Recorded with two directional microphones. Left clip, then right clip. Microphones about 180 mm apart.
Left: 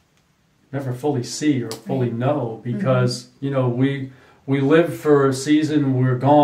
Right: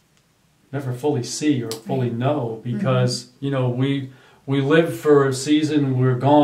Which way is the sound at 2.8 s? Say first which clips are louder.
Left 2 dB; 15° right (ahead or behind).